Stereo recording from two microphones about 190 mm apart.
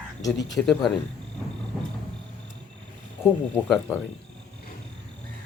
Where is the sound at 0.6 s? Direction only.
5° left (ahead or behind).